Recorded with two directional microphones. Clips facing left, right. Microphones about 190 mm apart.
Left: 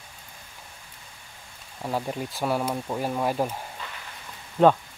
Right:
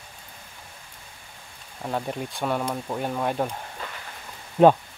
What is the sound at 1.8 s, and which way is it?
Speech, 5° left (ahead or behind).